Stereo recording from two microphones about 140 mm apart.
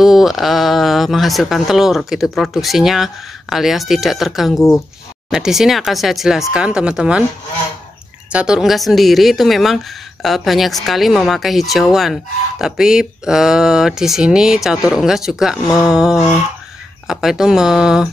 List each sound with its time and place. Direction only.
0.0 s a woman's voice: centre (ahead or behind)
4.6 s speech: 20° left (ahead or behind)
5.3 s a woman's voice: 5° right (ahead or behind)
8.3 s a woman's voice: 5° right (ahead or behind)